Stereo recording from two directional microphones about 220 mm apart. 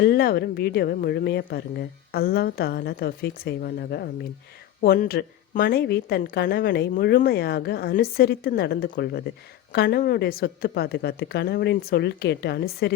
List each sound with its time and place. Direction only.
0.0 s a woman's voice: 45° left (ahead or behind)